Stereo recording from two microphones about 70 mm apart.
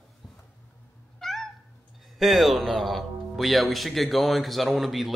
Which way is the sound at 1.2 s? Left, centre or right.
Centre.